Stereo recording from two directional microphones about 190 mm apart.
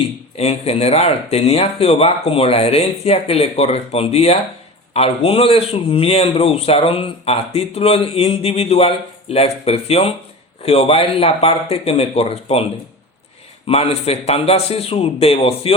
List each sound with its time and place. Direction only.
0.3 s a man's voice: 30° left (ahead or behind)
13.7 s a man's voice: 35° left (ahead or behind)